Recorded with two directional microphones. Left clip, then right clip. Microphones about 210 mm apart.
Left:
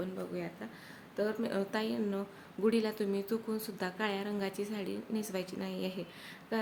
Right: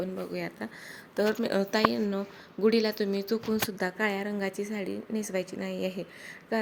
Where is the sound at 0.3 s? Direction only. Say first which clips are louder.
Right 6 dB; 45° right (ahead or behind).